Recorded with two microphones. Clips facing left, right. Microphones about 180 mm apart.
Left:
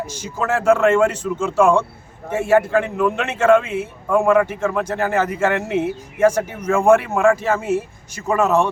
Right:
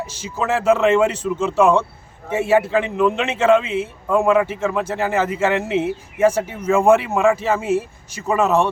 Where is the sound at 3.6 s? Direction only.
50° left (ahead or behind).